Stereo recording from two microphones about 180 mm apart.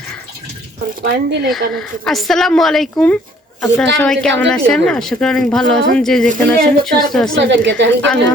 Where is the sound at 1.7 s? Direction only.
Centre (ahead or behind).